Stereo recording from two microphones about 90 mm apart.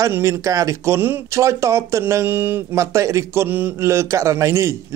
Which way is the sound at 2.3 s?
20° right (ahead or behind).